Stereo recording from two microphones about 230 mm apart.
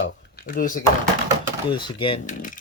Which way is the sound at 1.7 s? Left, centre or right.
Left.